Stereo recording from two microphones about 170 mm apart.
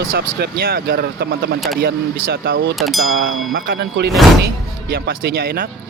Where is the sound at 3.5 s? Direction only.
65° right (ahead or behind).